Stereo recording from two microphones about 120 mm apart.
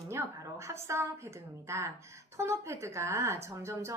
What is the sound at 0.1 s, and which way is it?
A woman's voice, 25° right (ahead or behind).